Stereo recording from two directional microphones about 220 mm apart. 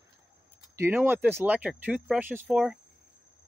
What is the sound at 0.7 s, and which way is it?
Speech, 10° right (ahead or behind).